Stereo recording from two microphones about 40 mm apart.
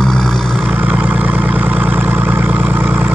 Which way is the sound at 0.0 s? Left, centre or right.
Centre.